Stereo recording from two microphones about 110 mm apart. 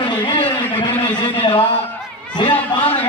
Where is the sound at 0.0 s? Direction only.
45° left (ahead or behind).